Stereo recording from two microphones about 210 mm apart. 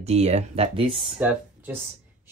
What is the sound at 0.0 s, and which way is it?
Speech, 30° right (ahead or behind).